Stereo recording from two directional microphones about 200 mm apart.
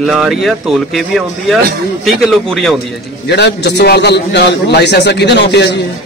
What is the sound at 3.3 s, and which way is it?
A man's voice, 55° left (ahead or behind).